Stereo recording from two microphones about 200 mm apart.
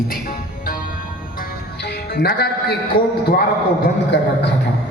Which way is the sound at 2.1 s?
50° left (ahead or behind).